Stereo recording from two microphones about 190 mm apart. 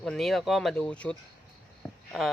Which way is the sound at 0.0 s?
Centre (ahead or behind).